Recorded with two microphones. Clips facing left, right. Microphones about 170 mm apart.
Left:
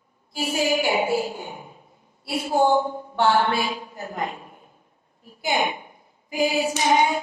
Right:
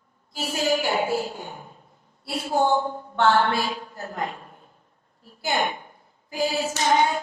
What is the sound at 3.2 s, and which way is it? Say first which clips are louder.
A woman's voice: even; 10° left (ahead or behind).